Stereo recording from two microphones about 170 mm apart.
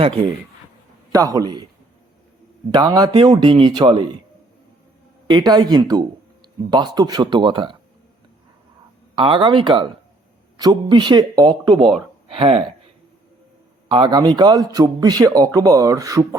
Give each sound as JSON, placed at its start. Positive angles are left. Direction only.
{"t": 0.0, "sound": "a man's voice", "side_deg": -30}
{"t": 2.7, "sound": "a man's voice", "side_deg": -20}
{"t": 5.3, "sound": "a man's voice", "side_deg": -25}
{"t": 9.1, "sound": "a man's voice", "side_deg": -30}
{"t": 13.8, "sound": "a man's voice", "side_deg": -30}